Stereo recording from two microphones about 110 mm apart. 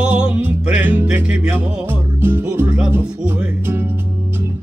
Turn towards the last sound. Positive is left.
turn(degrees=-20)  # may be behind; listen again after turning